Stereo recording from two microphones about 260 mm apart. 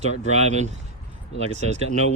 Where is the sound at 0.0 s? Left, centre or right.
Right.